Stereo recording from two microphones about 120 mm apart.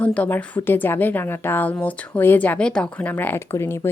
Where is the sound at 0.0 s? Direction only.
10° left (ahead or behind).